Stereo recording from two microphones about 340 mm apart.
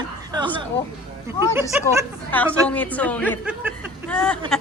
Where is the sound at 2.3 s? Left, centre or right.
Centre.